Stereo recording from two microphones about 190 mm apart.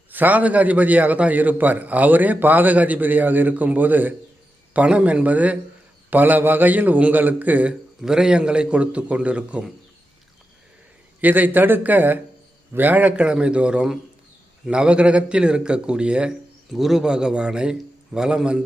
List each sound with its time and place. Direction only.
0.1 s a man's voice: 10° right (ahead or behind)
11.2 s a man's voice: 10° right (ahead or behind)